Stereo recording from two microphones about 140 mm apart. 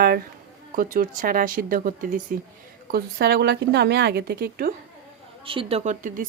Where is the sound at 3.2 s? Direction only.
90° right.